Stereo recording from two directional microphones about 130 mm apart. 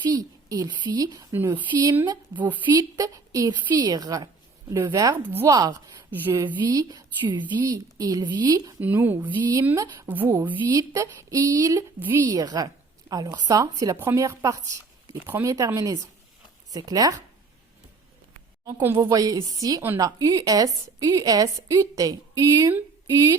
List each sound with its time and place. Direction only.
0.0 s a woman's voice: 30° right (ahead or behind)
1.3 s a woman's voice: 20° right (ahead or behind)
1.5 s a woman's voice: 30° right (ahead or behind)
2.7 s a woman's voice: 25° right (ahead or behind)
5.1 s a woman's voice: 15° right (ahead or behind)
5.5 s a woman's voice: 30° right (ahead or behind)
8.8 s a woman's voice: 15° right (ahead or behind)
18.6 s a woman's voice: 20° right (ahead or behind)